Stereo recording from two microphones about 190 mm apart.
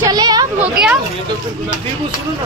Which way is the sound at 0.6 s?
5° right (ahead or behind).